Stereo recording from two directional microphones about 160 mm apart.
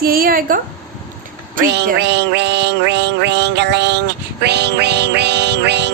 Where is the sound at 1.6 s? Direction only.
90° right.